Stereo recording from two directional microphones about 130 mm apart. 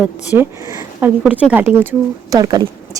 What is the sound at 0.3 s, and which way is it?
Speech, 15° right (ahead or behind).